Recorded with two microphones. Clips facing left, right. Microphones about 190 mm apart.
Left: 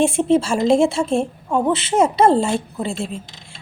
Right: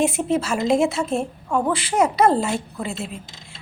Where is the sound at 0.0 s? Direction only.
30° left (ahead or behind).